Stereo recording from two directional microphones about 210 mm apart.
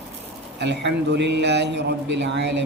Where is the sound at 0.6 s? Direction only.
55° right (ahead or behind).